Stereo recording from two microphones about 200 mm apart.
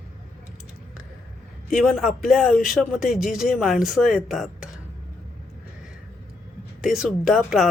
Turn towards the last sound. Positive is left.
turn(degrees=0)  # may be behind; listen again after turning